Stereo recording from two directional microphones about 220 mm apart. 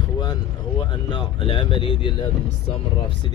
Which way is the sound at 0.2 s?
20° left (ahead or behind).